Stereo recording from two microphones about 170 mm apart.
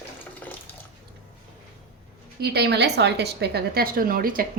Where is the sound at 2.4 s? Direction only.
75° right (ahead or behind); by 4.4 s 55° right (ahead or behind).